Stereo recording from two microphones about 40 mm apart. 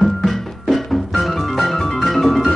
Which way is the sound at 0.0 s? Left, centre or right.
Centre.